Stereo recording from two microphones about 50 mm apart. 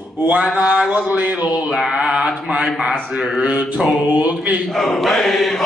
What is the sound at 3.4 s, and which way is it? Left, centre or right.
Speech, right.